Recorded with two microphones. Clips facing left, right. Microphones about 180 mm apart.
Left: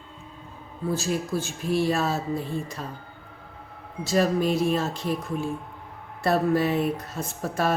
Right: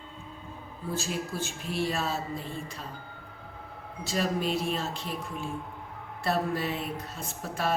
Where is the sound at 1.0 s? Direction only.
40° left (ahead or behind).